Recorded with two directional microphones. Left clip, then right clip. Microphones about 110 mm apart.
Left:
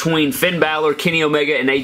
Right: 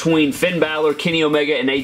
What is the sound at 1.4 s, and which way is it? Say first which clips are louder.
Speech: left 1 dB; 35° left (ahead or behind).